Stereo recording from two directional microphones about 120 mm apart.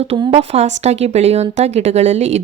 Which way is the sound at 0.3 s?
55° right (ahead or behind).